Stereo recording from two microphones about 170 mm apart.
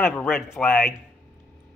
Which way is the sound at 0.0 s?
10° left (ahead or behind).